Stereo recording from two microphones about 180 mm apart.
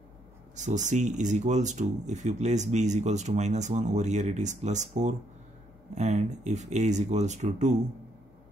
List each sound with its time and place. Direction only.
0.6 s speech: 40° right (ahead or behind)